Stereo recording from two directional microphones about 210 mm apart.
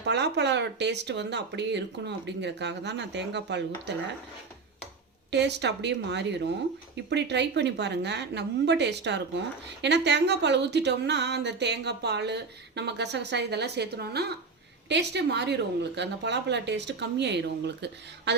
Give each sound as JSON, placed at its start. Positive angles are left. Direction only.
{"t": 0.0, "sound": "speech", "side_deg": -55}
{"t": 5.3, "sound": "a woman's voice", "side_deg": -55}